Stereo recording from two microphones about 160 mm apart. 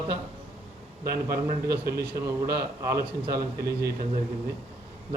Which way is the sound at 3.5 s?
75° right (ahead or behind).